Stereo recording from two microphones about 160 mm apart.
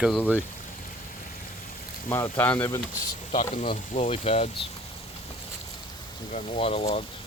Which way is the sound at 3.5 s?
45° left (ahead or behind).